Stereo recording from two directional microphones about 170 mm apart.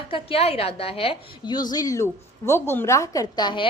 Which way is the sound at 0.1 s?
35° left (ahead or behind).